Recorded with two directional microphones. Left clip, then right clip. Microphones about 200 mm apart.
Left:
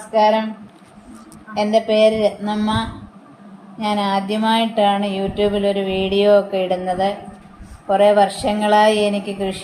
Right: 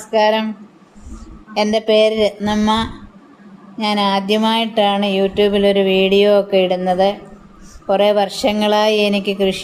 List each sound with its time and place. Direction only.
0.1 s speech: 55° right (ahead or behind)
1.5 s speech: 55° right (ahead or behind)